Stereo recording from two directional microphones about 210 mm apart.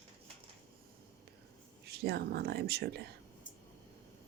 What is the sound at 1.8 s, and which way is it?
Speech, 50° right (ahead or behind).